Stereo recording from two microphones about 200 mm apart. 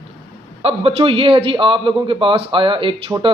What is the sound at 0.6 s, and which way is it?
A man's voice, 30° right (ahead or behind).